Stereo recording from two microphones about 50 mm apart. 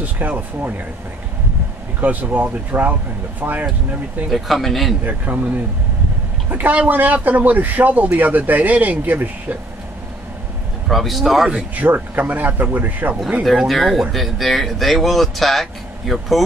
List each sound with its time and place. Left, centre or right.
0.0 s speech: right
2.0 s speech: right
4.3 s speech: centre
5.0 s speech: right
10.9 s speech: centre
11.7 s speech: right
13.4 s speech: centre